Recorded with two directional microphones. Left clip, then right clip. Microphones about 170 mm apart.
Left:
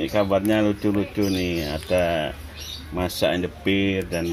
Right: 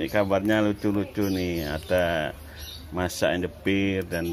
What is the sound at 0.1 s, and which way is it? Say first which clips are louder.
Speech: left 2 dB; 5° right (ahead or behind).